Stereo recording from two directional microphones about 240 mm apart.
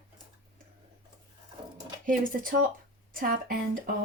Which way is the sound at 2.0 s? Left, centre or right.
Right.